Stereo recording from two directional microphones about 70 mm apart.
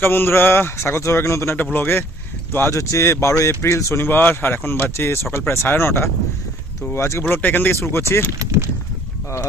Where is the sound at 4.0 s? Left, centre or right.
Left.